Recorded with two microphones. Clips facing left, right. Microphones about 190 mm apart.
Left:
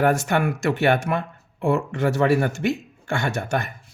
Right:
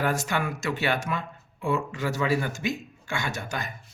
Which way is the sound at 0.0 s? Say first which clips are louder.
Left 7 dB; 60° left (ahead or behind).